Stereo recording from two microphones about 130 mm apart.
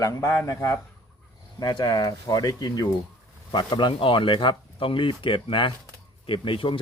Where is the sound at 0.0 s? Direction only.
25° left (ahead or behind).